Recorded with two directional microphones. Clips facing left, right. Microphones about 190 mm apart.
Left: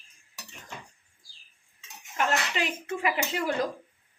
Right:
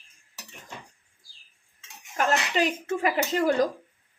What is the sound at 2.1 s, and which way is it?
Speech, 40° right (ahead or behind).